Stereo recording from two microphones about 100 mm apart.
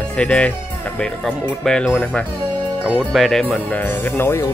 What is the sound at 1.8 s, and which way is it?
Speech, 20° left (ahead or behind).